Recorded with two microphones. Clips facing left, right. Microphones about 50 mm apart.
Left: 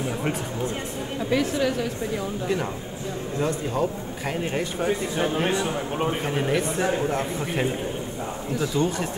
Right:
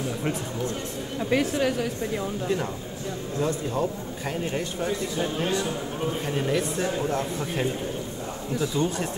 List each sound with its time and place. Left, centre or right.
1.3 s a woman's voice: right
2.4 s a man's voice: left
4.3 s a man's voice: left
7.0 s a man's voice: left